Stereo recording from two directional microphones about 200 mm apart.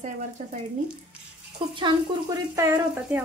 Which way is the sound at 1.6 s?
25° right (ahead or behind).